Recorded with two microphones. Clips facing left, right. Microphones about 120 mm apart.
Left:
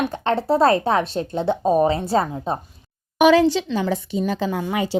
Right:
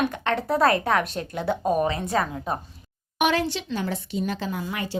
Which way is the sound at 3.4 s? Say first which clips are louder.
Left 9 dB; 90° left.